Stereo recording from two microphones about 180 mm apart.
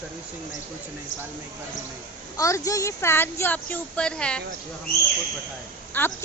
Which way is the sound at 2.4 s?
15° left (ahead or behind).